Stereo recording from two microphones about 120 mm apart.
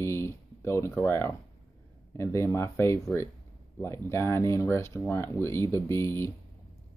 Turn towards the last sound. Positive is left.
turn(degrees=20)  # may be behind; listen again after turning